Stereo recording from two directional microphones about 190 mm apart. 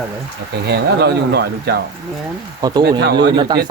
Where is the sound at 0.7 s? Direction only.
60° right (ahead or behind).